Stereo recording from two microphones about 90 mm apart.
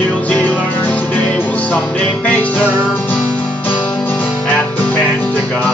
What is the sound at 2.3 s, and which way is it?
Music, 20° left (ahead or behind).